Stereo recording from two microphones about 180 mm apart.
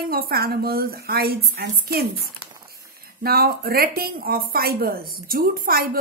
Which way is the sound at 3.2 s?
55° right (ahead or behind).